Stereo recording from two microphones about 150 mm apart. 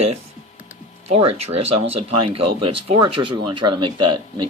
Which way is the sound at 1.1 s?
45° right (ahead or behind).